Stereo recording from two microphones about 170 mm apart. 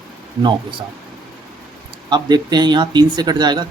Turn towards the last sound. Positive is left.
turn(degrees=-25)  # may be behind; listen again after turning